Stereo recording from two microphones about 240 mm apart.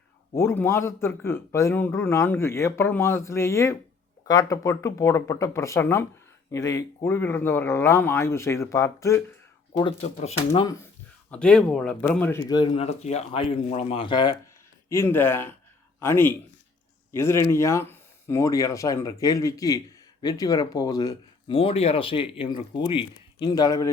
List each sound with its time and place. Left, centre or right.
0.3 s speech: centre; by 10.7 s left
11.3 s speech: centre